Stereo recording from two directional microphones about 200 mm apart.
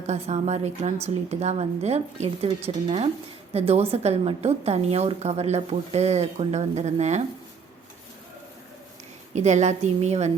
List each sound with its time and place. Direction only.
0.1 s a woman's voice: 35° right (ahead or behind)
9.3 s a woman's voice: 35° right (ahead or behind)